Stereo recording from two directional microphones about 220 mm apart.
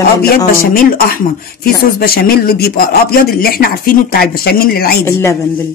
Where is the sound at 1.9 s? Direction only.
45° left (ahead or behind).